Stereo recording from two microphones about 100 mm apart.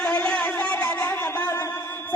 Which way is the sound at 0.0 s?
10° left (ahead or behind).